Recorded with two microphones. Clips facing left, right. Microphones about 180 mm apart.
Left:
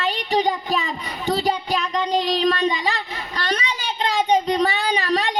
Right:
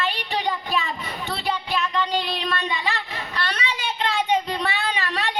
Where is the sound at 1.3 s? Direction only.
40° left (ahead or behind).